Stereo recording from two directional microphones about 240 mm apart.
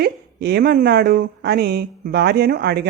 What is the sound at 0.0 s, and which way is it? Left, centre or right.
Speech, right.